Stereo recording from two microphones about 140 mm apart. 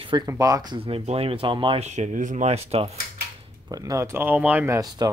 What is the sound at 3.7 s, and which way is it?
Speech, 25° right (ahead or behind).